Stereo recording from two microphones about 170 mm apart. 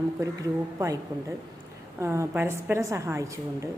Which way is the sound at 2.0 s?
15° right (ahead or behind).